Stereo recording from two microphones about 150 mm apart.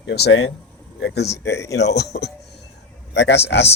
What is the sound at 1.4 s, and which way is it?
Speech, 15° left (ahead or behind).